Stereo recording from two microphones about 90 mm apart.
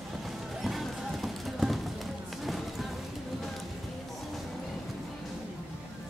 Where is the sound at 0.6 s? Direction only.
Centre (ahead or behind).